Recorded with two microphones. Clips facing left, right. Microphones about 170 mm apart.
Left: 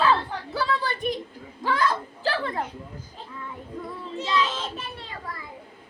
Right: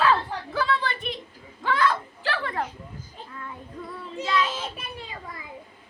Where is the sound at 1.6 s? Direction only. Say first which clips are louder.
Right 1 dB; 40° left (ahead or behind).